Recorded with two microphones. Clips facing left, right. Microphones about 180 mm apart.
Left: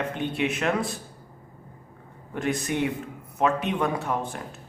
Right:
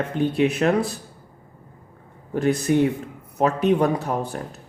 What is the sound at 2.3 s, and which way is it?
Speech, 35° right (ahead or behind).